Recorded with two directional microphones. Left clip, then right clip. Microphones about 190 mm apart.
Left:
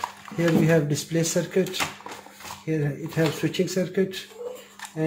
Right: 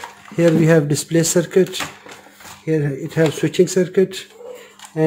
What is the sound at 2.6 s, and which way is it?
Speech, 65° right (ahead or behind).